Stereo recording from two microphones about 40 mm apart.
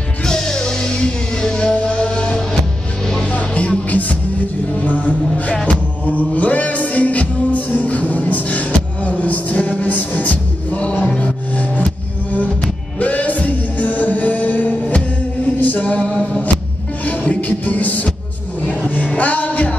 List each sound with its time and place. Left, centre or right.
0.2 s music: centre
1.7 s music: left